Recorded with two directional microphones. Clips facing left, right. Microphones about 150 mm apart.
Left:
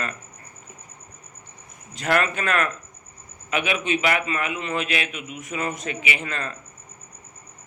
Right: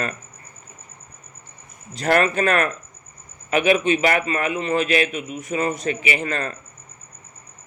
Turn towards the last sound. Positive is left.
turn(degrees=-40)  # may be behind; listen again after turning